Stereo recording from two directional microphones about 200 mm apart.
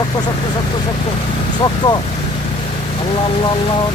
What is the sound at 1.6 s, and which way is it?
Speech, 25° left (ahead or behind).